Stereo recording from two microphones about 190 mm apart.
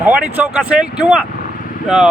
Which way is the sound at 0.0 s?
10° right (ahead or behind).